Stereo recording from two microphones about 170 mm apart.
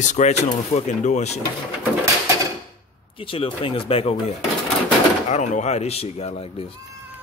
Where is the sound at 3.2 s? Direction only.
30° left (ahead or behind).